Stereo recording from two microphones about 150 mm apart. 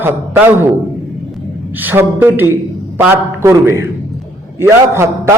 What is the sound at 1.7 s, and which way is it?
A man's voice, 10° right (ahead or behind).